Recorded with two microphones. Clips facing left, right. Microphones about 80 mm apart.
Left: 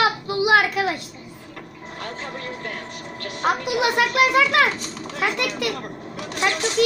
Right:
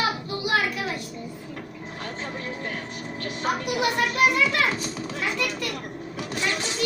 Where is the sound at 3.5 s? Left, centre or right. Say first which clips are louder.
Left 4 dB; left.